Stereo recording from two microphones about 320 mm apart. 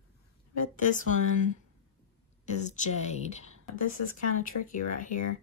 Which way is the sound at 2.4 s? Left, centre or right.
Left.